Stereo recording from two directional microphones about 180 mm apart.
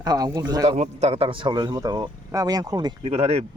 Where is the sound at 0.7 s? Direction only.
40° right (ahead or behind); by 2.9 s 20° right (ahead or behind).